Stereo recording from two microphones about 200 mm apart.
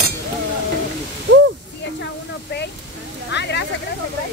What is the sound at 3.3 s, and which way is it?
Speech, 60° left (ahead or behind).